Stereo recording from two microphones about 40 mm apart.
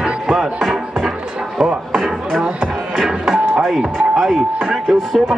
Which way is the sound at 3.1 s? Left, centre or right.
Centre.